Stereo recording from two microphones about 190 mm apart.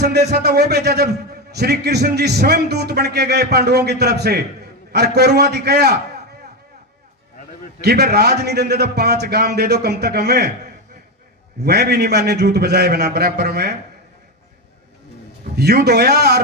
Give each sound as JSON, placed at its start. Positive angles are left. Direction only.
{"t": 0.0, "sound": "a man's voice", "side_deg": -60}
{"t": 7.9, "sound": "a man's voice", "side_deg": -60}
{"t": 11.6, "sound": "a man's voice", "side_deg": -55}
{"t": 15.5, "sound": "a man's voice", "side_deg": -55}